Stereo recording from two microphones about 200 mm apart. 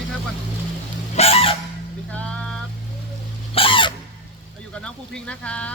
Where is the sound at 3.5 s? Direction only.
25° left (ahead or behind).